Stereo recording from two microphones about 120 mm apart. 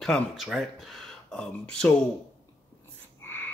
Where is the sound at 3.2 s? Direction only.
15° left (ahead or behind).